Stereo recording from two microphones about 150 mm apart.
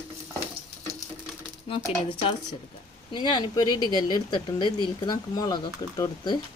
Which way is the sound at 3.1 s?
30° left (ahead or behind).